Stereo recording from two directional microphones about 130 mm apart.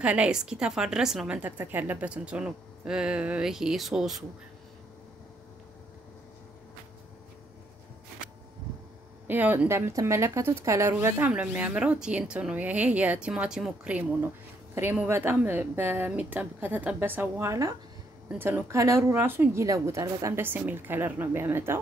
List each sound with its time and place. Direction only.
0.0 s speech: 10° right (ahead or behind)
9.3 s speech: 15° right (ahead or behind)